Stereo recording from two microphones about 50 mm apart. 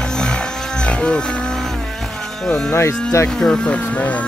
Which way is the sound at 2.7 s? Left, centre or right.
Left.